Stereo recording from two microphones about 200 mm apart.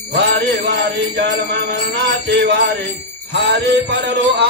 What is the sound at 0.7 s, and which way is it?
Music, 60° right (ahead or behind).